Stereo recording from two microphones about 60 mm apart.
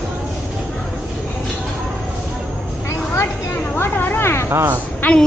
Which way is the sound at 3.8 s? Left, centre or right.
Left.